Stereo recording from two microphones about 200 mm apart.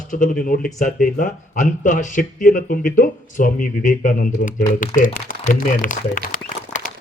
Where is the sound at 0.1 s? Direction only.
40° left (ahead or behind).